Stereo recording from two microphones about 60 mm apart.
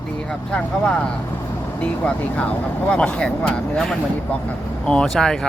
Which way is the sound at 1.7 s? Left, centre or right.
Left.